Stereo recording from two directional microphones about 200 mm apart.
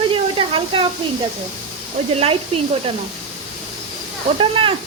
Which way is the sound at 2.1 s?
30° right (ahead or behind).